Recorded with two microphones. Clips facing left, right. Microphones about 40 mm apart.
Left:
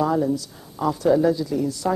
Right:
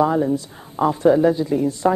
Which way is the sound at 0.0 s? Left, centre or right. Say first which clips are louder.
Right 3 dB; right.